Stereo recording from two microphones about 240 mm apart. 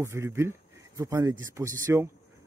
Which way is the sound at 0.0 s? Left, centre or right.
Centre.